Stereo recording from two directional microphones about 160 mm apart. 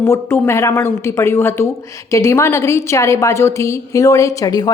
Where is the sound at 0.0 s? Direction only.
15° left (ahead or behind).